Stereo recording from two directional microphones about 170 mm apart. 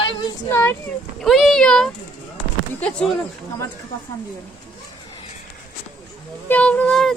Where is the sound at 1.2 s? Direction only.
Centre (ahead or behind).